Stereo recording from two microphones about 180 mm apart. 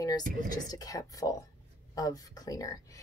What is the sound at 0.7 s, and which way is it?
Speech, 20° left (ahead or behind).